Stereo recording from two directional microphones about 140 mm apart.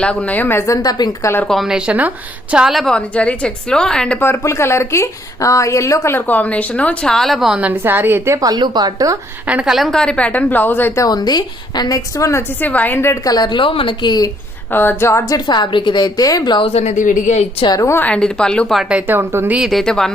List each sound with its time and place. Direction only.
0.0 s a woman's voice: 10° left (ahead or behind); by 1.3 s 30° left (ahead or behind)
1.5 s a woman's voice: centre (ahead or behind); by 9.1 s 25° right (ahead or behind)
9.5 s a woman's voice: 5° right (ahead or behind); by 14.3 s 30° left (ahead or behind)
14.7 s a woman's voice: 15° left (ahead or behind); by 16.6 s 30° left (ahead or behind)
16.6 s a woman's voice: 45° left (ahead or behind)
17.0 s speech: 65° left (ahead or behind)
17.7 s a woman's voice: 20° left (ahead or behind); by 18.8 s 5° left (ahead or behind)
18.8 s speech: 10° right (ahead or behind)